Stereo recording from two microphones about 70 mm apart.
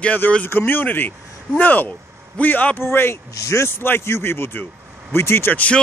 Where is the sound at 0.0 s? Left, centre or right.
Left.